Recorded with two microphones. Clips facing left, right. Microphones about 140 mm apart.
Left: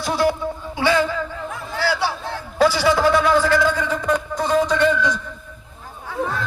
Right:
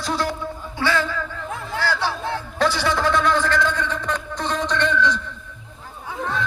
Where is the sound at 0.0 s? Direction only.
10° left (ahead or behind).